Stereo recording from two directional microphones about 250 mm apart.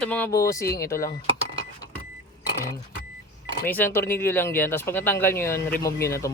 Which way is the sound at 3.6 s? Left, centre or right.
Centre.